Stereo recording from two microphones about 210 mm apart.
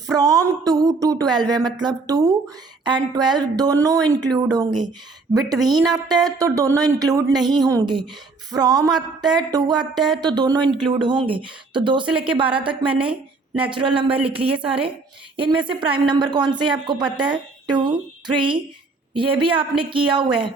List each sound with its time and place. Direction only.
0.1 s a sound: 15° right (ahead or behind)
7.3 s speech: 20° right (ahead or behind)
10.0 s a woman's voice: centre (ahead or behind)
10.2 s speech: 20° right (ahead or behind)
10.6 s a woman's voice: centre (ahead or behind)
11.0 s speech: 25° right (ahead or behind)
12.0 s a woman's voice: 5° right (ahead or behind)
13.7 s speech: 25° right (ahead or behind)
19.1 s speech: 25° right (ahead or behind)